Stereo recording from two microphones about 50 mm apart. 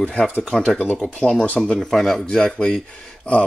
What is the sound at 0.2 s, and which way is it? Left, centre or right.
Speech, centre.